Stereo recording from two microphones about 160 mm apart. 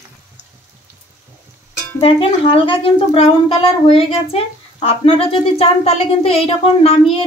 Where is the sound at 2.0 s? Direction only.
35° left (ahead or behind).